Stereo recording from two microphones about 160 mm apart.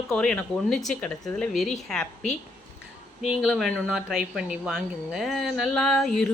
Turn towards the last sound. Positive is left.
turn(degrees=0)  # may be behind; listen again after turning